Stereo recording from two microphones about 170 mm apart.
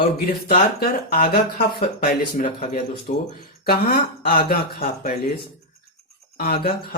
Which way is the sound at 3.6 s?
60° left (ahead or behind).